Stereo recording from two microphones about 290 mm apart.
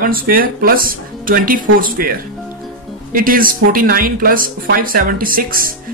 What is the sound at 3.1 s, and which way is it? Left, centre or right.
Speech, right.